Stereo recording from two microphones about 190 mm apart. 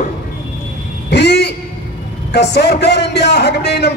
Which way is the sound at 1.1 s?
60° left (ahead or behind).